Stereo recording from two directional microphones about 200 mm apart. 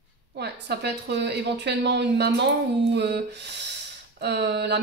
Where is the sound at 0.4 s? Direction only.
55° right (ahead or behind).